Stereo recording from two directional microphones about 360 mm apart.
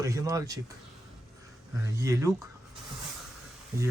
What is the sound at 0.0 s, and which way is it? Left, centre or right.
Speech, centre.